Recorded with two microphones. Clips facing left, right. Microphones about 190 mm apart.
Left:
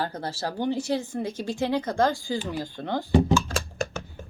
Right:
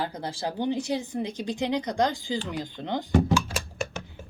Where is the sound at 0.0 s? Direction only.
15° right (ahead or behind).